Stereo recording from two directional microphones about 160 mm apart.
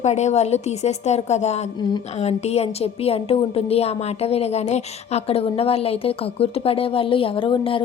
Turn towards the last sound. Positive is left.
turn(degrees=35)  # may be behind; listen again after turning